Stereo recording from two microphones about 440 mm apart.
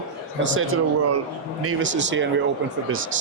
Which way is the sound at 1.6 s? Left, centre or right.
Right.